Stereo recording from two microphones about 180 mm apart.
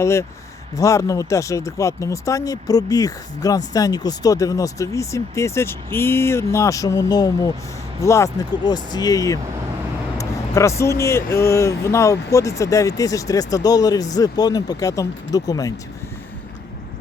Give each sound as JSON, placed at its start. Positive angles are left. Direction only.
{"t": 0.0, "sound": "speech", "side_deg": 15}